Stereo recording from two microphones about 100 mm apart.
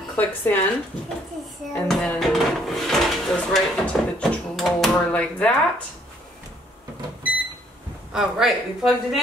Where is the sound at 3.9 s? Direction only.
Centre (ahead or behind).